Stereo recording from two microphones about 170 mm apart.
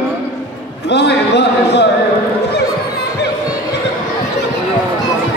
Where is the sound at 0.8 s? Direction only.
80° left.